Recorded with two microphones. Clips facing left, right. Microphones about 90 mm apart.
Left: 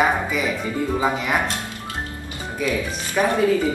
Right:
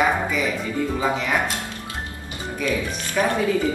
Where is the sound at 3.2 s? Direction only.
5° left (ahead or behind).